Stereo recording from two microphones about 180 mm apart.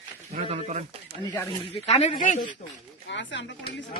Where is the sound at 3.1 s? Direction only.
85° left.